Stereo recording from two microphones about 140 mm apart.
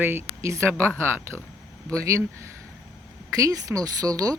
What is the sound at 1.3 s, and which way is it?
Speech, 10° left (ahead or behind).